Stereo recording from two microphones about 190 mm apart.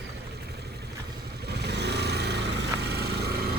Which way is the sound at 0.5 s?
60° right (ahead or behind).